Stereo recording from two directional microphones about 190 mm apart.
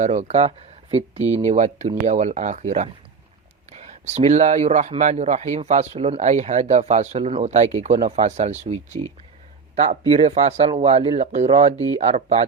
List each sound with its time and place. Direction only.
0.0 s speech: 35° right (ahead or behind)